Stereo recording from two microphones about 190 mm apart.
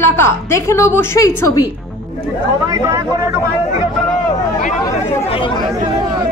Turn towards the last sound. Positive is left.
turn(degrees=30)  # may be behind; listen again after turning